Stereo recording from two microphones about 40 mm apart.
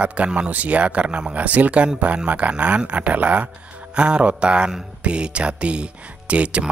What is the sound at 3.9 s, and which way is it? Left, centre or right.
Speech, right.